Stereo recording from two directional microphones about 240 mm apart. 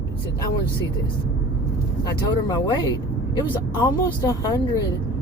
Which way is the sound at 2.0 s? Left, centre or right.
Centre.